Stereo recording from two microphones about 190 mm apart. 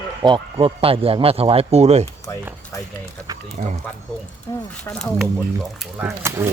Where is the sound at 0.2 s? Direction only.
25° right (ahead or behind).